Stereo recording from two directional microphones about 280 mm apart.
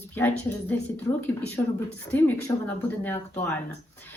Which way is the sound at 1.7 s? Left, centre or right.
Centre.